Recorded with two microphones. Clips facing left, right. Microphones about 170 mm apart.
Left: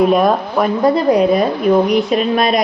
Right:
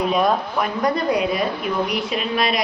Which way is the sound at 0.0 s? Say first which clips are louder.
Left 7 dB; 50° left (ahead or behind).